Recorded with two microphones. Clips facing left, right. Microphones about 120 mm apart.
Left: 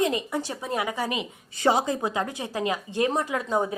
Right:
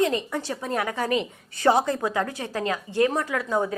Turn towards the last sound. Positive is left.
turn(degrees=20)  # may be behind; listen again after turning